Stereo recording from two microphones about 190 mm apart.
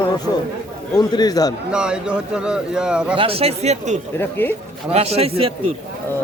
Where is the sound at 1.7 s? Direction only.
5° right (ahead or behind).